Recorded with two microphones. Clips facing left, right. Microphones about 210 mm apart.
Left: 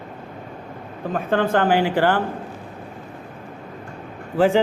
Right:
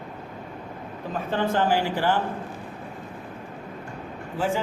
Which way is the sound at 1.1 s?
55° left (ahead or behind).